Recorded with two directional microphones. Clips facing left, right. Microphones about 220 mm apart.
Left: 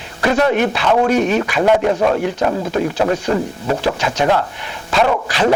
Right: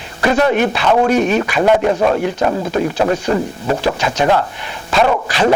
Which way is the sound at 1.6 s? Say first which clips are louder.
Right 1 dB; 30° right (ahead or behind).